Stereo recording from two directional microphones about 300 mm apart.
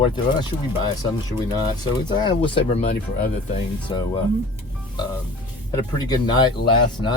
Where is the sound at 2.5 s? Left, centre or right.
Left.